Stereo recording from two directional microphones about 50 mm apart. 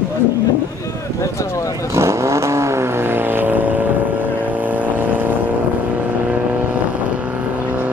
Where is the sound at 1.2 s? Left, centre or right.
Left.